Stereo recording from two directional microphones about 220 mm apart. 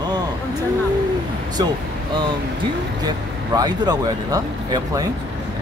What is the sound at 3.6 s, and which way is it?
Speech, 15° right (ahead or behind).